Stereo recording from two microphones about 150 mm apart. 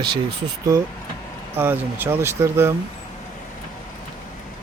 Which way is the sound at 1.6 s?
15° right (ahead or behind).